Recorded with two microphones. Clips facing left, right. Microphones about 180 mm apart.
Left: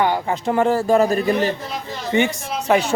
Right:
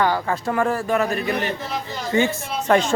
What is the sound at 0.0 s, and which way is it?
A man's voice, 20° left (ahead or behind).